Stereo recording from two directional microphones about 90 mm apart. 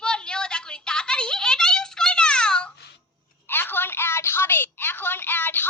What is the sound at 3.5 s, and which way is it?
Telephone, 25° left (ahead or behind).